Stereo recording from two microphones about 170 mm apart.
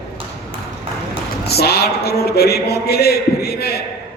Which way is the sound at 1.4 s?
70° left (ahead or behind).